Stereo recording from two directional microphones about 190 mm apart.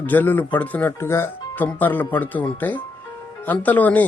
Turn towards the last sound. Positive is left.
turn(degrees=10)  # may be behind; listen again after turning